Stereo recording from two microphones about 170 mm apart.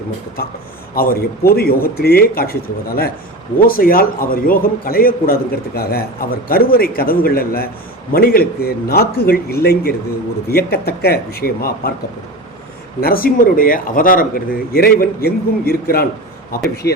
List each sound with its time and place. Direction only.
0.9 s a man's voice: 60° left (ahead or behind)
13.0 s a man's voice: 60° left (ahead or behind)